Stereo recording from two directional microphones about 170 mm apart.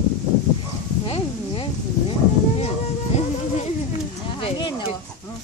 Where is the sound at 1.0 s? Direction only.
30° left (ahead or behind).